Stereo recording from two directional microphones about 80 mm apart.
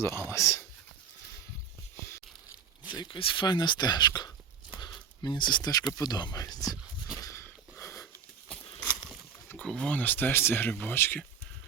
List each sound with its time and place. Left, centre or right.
0.0 s speech: left
2.9 s speech: left
4.8 s a sound: left
6.0 s speech: left
6.4 s speech: left
7.4 s a sound: left
9.6 s speech: centre
10.0 s speech: left